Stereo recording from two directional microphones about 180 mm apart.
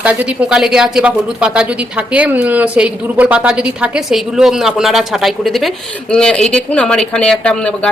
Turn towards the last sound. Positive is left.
turn(degrees=5)  # may be behind; listen again after turning